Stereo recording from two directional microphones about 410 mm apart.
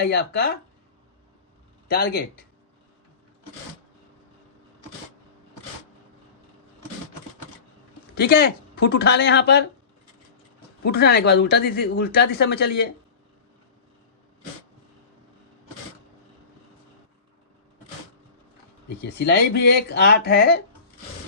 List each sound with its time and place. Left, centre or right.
0.0 s speech: left
1.9 s speech: left
8.1 s speech: left
10.8 s speech: left
19.2 s speech: left